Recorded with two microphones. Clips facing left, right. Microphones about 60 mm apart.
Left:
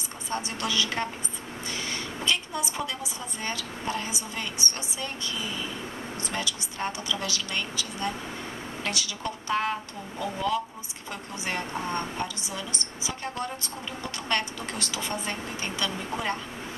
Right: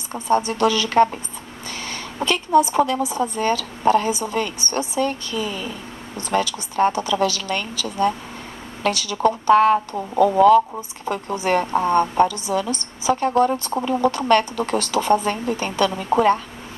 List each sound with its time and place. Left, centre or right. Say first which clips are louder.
0.1 s a woman's voice: right 13 dB; right